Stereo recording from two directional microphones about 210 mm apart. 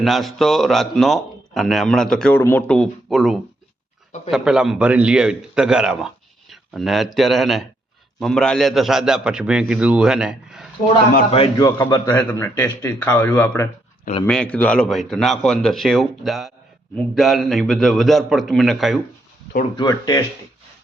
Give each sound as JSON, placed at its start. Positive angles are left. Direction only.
{"t": 0.0, "sound": "a man's voice", "side_deg": 0}
{"t": 11.3, "sound": "a man's voice", "side_deg": 25}
{"t": 12.1, "sound": "a man's voice", "side_deg": 10}
{"t": 19.7, "sound": "speech", "side_deg": 20}